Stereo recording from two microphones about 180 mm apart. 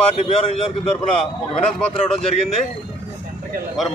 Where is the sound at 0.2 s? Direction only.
35° left (ahead or behind).